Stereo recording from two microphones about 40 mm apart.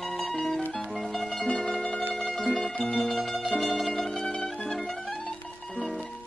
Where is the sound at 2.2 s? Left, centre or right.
Left.